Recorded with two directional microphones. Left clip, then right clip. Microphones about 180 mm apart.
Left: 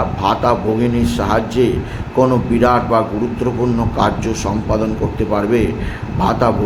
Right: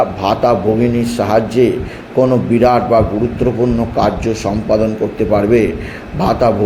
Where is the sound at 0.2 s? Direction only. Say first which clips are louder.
Right 2 dB; 15° right (ahead or behind).